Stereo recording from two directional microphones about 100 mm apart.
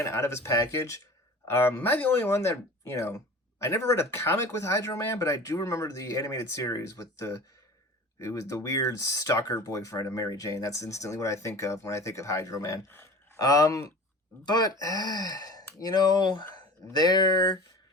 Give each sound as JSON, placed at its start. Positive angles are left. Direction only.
{"t": 0.0, "sound": "speech", "side_deg": 25}
{"t": 12.9, "sound": "gasp", "side_deg": 25}
{"t": 13.4, "sound": "speech", "side_deg": 40}
{"t": 14.4, "sound": "speech", "side_deg": 45}